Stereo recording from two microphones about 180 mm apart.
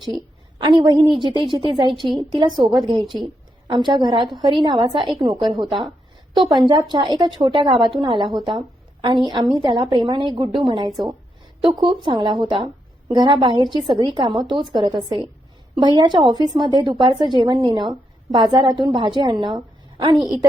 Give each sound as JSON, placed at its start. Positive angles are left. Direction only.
{"t": 0.6, "sound": "a woman's voice", "side_deg": -25}